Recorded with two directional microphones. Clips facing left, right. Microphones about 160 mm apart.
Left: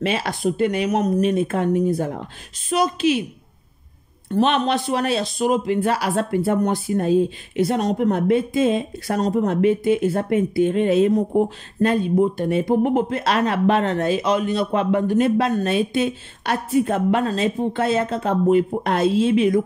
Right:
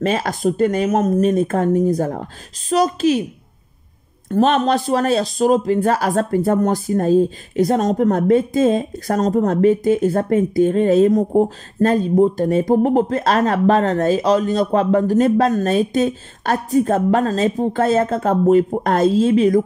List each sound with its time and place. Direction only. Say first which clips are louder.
0.0 s speech: right 3 dB; 45° right (ahead or behind)
4.3 s speech: right 3 dB; 45° right (ahead or behind)